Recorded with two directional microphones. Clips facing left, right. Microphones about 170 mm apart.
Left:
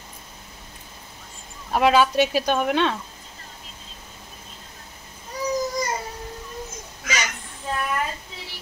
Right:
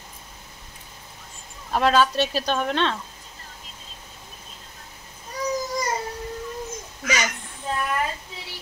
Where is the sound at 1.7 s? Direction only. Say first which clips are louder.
Left 2 dB; 10° left (ahead or behind).